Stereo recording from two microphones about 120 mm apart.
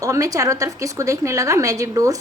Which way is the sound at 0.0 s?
30° right (ahead or behind).